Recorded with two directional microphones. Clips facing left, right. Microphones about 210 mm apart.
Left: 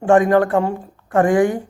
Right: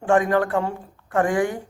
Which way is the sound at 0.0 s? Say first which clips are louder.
Left 5 dB; 45° left (ahead or behind).